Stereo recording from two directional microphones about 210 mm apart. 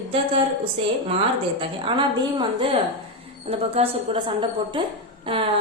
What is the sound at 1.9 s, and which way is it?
Speech, 25° right (ahead or behind).